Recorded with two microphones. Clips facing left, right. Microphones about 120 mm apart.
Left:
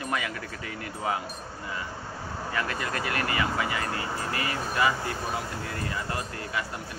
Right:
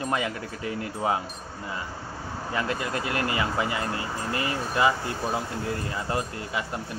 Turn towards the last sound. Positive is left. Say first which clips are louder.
# right 3 dB
turn(degrees=-20)  # may be behind; listen again after turning